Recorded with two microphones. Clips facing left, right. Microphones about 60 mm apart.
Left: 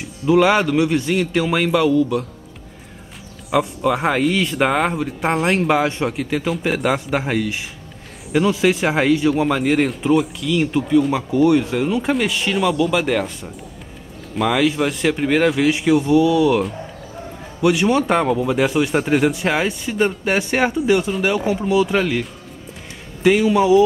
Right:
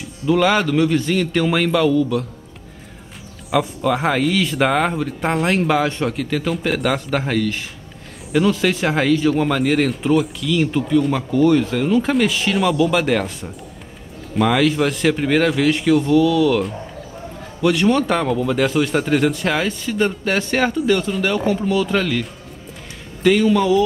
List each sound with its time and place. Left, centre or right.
0.3 s a man's voice: centre
3.4 s a man's voice: centre
23.2 s speech: centre